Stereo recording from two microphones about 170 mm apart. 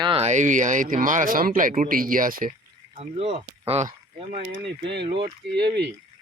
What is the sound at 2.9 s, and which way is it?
Speech, 35° right (ahead or behind).